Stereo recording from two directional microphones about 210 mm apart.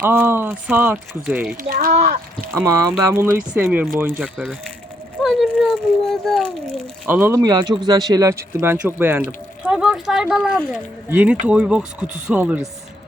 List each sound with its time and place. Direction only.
0.0 s speech: 10° right (ahead or behind)
1.6 s speech: 40° right (ahead or behind)
2.6 s speech: 10° right (ahead or behind)
5.2 s a sound: centre (ahead or behind)
7.0 s speech: 10° right (ahead or behind)